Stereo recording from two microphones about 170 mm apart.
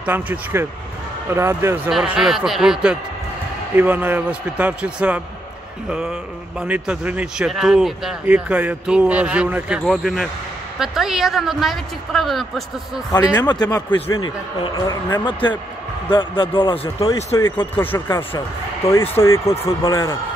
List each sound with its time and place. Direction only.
0.0 s a man's voice: 10° right (ahead or behind)
1.9 s a man's voice: centre (ahead or behind)
13.1 s a man's voice: 20° left (ahead or behind)
13.8 s speech: 10° left (ahead or behind)
14.2 s a man's voice: 25° left (ahead or behind)
17.1 s speech: 15° left (ahead or behind)
19.2 s speech: 15° left (ahead or behind)